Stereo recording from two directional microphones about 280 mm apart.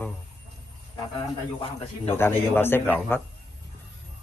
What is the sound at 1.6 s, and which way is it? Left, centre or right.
Speech, left.